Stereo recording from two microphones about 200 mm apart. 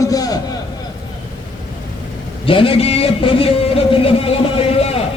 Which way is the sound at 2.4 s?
25° left (ahead or behind).